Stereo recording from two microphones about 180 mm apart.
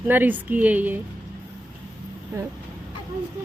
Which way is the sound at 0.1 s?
10° right (ahead or behind).